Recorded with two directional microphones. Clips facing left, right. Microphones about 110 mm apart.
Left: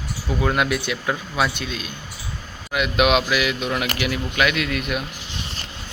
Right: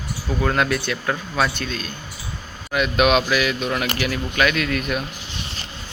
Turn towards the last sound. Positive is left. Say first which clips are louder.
# right 1 dB
turn(degrees=15)  # may be behind; listen again after turning